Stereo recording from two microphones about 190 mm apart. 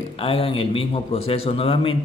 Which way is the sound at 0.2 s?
30° left (ahead or behind).